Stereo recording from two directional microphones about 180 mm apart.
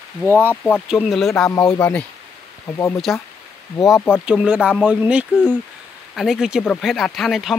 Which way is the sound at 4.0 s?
10° left (ahead or behind).